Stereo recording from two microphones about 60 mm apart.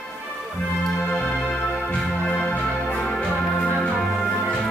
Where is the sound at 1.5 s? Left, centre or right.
Centre.